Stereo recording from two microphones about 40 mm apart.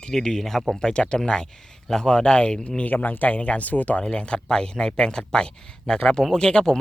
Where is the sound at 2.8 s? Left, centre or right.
Left.